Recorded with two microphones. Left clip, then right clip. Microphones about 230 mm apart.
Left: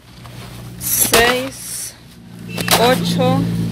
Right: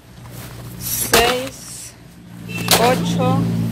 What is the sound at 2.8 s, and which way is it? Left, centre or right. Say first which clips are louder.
Speech: left 2 dB; left.